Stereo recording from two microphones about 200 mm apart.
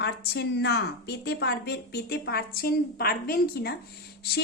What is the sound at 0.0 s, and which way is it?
A woman's voice, 55° left (ahead or behind).